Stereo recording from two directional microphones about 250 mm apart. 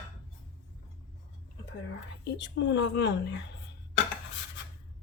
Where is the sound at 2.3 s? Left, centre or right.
Left.